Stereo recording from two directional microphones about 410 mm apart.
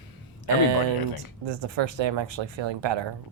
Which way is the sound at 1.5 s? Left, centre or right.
Right.